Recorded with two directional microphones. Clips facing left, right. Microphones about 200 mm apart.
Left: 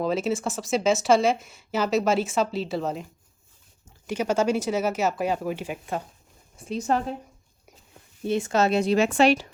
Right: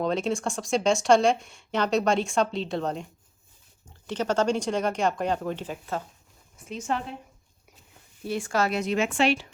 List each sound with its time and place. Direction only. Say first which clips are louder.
0.0 s speech: left 1 dB; 5° left (ahead or behind)
6.6 s speech: left 5 dB; 35° left (ahead or behind)
8.2 s speech: left 4 dB; 20° left (ahead or behind); by 9.5 s 40° left (ahead or behind)